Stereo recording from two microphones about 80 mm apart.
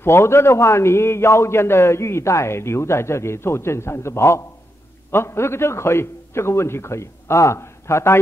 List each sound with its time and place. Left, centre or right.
0.0 s a man's voice: left